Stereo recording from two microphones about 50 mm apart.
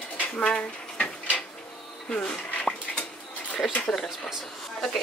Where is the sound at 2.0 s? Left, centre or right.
Centre.